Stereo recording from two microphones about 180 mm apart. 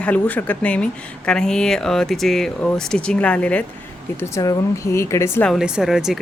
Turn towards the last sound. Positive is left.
turn(degrees=0)  # may be behind; listen again after turning